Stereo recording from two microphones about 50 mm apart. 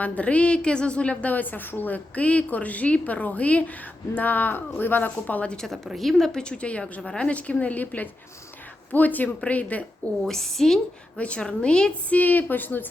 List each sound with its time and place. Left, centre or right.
0.0 s a woman's voice: left
6.0 s a woman's voice: centre
6.4 s a woman's voice: left
10.2 s a woman's voice: centre
11.2 s a woman's voice: left
12.0 s speech: left